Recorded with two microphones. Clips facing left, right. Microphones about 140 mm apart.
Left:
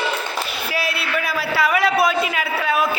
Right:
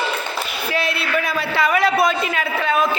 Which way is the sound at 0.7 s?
5° left (ahead or behind).